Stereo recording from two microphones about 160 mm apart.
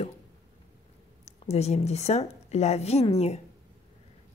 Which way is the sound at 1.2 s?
40° left (ahead or behind).